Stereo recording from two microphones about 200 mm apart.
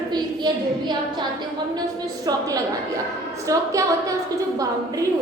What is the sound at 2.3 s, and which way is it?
Speech, 20° right (ahead or behind).